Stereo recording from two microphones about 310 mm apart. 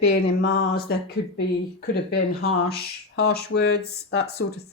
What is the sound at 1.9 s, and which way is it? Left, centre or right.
Speech, left.